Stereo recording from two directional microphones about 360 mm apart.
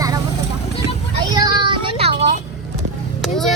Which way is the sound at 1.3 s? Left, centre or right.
Centre.